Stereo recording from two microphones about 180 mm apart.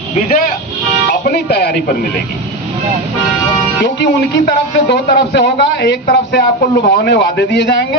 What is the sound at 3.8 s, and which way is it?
A man's voice, 70° left (ahead or behind).